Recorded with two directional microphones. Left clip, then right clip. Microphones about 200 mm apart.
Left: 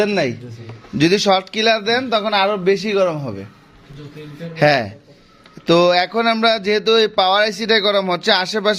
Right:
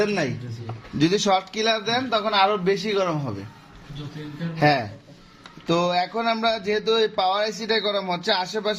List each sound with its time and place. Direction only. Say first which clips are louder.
0.0 s speech: left 6 dB; 40° left (ahead or behind)
4.5 s speech: left 6 dB; 40° left (ahead or behind)